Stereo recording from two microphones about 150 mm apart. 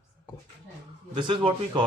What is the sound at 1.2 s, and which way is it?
Speech, 30° right (ahead or behind).